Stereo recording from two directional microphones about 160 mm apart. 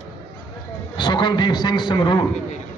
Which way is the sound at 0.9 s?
30° left (ahead or behind).